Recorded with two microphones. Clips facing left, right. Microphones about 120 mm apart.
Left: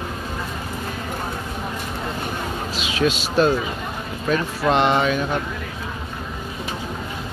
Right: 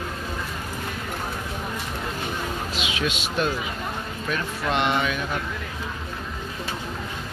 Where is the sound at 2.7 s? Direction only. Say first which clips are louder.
Left 9 dB; 40° left (ahead or behind).